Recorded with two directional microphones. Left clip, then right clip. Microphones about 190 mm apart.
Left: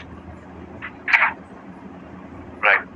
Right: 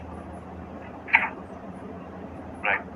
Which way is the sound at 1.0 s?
50° left (ahead or behind).